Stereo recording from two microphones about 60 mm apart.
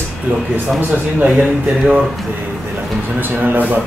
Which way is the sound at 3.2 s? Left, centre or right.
Right.